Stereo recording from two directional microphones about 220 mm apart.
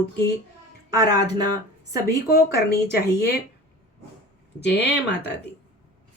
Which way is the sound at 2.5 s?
45° left (ahead or behind).